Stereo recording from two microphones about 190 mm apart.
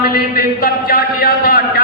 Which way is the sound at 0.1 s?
50° left (ahead or behind).